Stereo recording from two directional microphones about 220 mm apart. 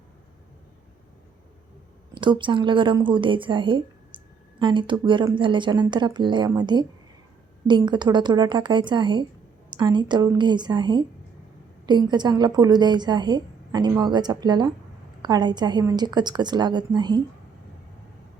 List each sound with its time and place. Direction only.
2.1 s a woman's voice: 20° right (ahead or behind)